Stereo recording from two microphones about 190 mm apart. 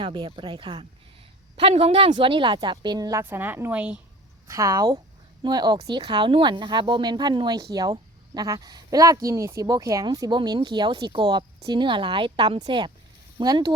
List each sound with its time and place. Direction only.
0.0 s speech: 25° right (ahead or behind)